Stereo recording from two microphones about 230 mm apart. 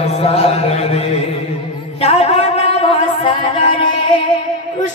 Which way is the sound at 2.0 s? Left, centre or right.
Left.